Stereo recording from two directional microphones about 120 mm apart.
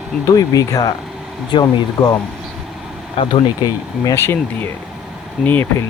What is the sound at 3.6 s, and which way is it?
Speech, 30° left (ahead or behind).